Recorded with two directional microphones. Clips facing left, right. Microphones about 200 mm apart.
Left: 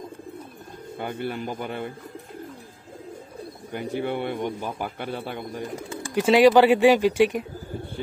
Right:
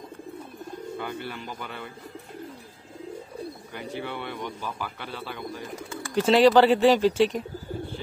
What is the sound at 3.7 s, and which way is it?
Speech, 50° left (ahead or behind).